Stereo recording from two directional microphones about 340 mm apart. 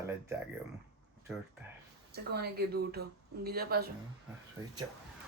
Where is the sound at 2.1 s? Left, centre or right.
Right.